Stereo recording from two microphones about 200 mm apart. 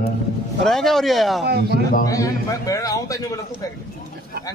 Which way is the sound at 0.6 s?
Centre (ahead or behind).